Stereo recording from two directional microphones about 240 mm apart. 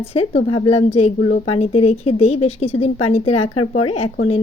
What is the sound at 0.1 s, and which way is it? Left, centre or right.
A woman's voice, left.